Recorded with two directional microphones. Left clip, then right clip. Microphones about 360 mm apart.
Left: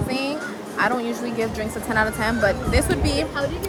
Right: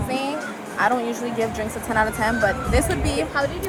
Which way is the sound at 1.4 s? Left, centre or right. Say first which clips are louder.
Right 1 dB; centre.